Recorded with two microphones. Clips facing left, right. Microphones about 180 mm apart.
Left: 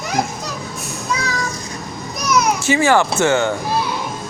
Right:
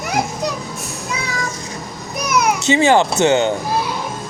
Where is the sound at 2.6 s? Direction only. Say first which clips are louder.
Right 4 dB; 20° right (ahead or behind).